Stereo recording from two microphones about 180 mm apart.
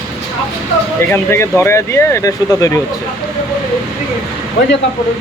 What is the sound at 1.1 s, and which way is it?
Speech, 15° left (ahead or behind).